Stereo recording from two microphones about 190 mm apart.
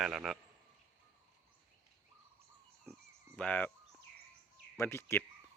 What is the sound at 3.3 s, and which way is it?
Speech, 5° left (ahead or behind).